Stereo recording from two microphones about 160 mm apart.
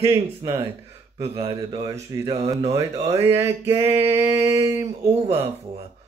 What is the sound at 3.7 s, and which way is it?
Speech, 40° right (ahead or behind).